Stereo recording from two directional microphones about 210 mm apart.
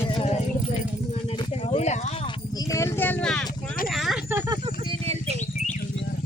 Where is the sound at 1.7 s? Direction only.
30° left (ahead or behind).